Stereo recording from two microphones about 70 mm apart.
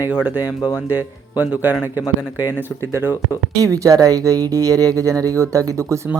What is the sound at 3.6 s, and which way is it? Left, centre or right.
Speech, right.